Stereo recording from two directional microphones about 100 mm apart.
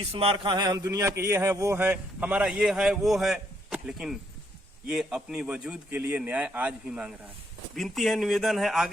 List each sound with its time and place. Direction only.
0.1 s a man's voice: 70° right (ahead or behind); by 7.1 s 10° right (ahead or behind)
7.8 s speech: centre (ahead or behind)